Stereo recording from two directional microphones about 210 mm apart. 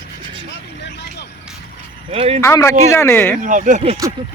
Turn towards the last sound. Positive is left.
turn(degrees=-35)  # may be behind; listen again after turning